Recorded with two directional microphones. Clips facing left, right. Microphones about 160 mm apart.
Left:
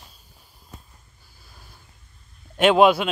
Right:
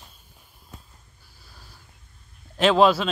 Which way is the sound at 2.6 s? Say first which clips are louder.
Left 2 dB; 15° left (ahead or behind).